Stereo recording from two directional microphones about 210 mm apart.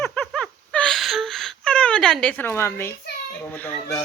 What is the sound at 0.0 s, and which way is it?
Whimper, 5° left (ahead or behind).